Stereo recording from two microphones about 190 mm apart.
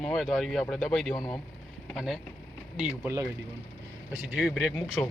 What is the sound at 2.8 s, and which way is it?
Speech, 10° right (ahead or behind).